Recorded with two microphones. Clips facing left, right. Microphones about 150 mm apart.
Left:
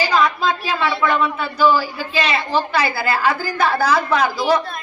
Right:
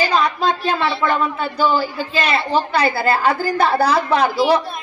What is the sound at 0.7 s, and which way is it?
Speech, 45° right (ahead or behind).